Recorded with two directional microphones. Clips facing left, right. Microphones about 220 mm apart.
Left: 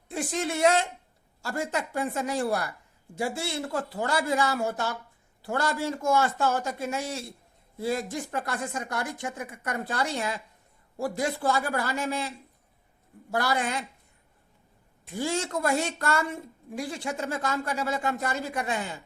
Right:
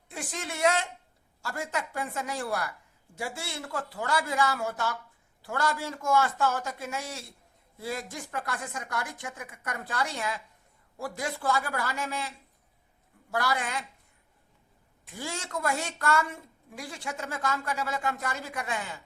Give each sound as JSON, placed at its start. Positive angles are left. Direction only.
{"t": 0.1, "sound": "a woman's voice", "side_deg": 30}
{"t": 13.3, "sound": "a woman's voice", "side_deg": 30}
{"t": 15.1, "sound": "a woman's voice", "side_deg": 25}